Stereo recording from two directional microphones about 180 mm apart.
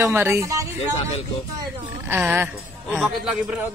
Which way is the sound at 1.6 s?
10° right (ahead or behind).